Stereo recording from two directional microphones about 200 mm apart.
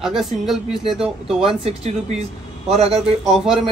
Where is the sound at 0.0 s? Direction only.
Centre (ahead or behind).